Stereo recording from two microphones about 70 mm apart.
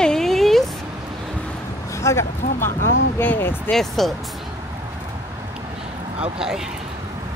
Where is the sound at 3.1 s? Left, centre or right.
Left.